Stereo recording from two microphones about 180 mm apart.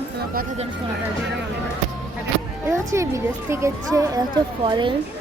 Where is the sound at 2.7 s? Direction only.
15° right (ahead or behind).